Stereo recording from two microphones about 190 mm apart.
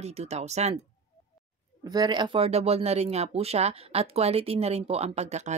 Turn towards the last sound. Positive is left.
turn(degrees=-35)  # may be behind; listen again after turning